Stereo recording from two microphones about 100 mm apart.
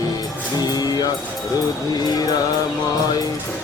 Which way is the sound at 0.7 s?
40° left (ahead or behind).